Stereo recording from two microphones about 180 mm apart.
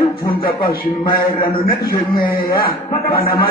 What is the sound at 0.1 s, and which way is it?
A man's voice, 55° left (ahead or behind).